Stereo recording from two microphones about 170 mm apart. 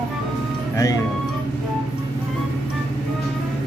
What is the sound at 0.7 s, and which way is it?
Speech, 20° left (ahead or behind).